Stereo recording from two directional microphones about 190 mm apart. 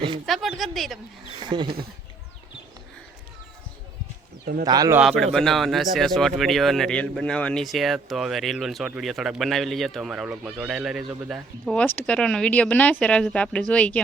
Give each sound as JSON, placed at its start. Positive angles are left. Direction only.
{"t": 0.3, "sound": "speech", "side_deg": 0}
{"t": 1.4, "sound": "speech", "side_deg": -25}
{"t": 4.6, "sound": "speech", "side_deg": -20}
{"t": 4.9, "sound": "speech", "side_deg": 0}
{"t": 11.6, "sound": "speech", "side_deg": 5}